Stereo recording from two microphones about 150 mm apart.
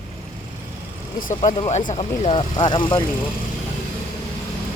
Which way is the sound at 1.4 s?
35° left (ahead or behind).